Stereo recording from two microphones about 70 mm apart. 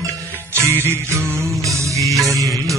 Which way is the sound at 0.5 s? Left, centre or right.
Right.